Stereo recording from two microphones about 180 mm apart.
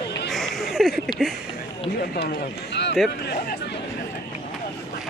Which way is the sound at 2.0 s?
55° left (ahead or behind).